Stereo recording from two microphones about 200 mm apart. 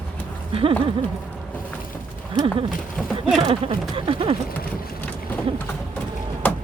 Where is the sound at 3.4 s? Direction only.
30° right (ahead or behind).